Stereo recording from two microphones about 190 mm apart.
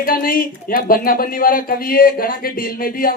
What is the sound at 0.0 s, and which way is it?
Speech, 50° left (ahead or behind).